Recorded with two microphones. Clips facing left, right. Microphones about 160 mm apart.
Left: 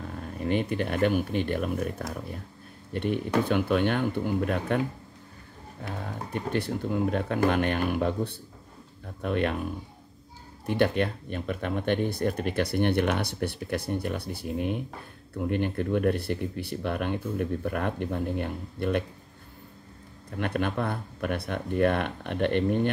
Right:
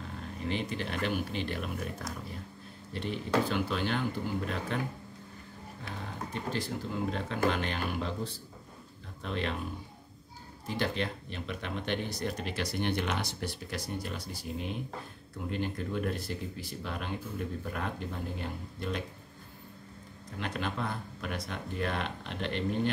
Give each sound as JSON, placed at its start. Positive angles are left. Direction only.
{"t": 0.4, "sound": "speech", "side_deg": 55}
{"t": 5.9, "sound": "speech", "side_deg": 60}
{"t": 10.7, "sound": "speech", "side_deg": 55}
{"t": 20.3, "sound": "speech", "side_deg": 55}